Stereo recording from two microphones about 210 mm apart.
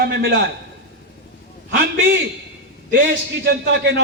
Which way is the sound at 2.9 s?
55° right (ahead or behind).